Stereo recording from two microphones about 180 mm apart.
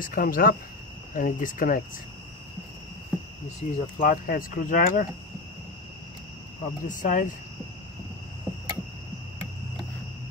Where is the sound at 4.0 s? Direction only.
50° left (ahead or behind).